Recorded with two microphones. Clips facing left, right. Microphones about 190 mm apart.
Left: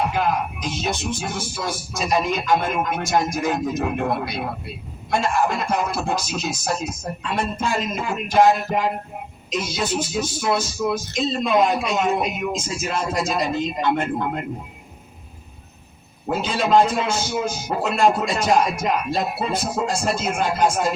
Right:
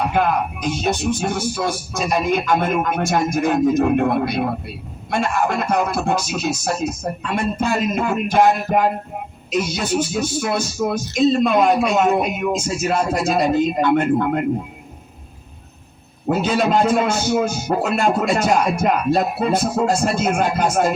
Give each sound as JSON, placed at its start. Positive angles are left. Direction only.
{"t": 0.1, "sound": "speech", "side_deg": -55}
{"t": 16.4, "sound": "speech", "side_deg": -55}